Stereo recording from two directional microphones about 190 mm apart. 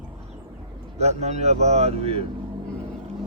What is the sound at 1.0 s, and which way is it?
Speech, 35° right (ahead or behind).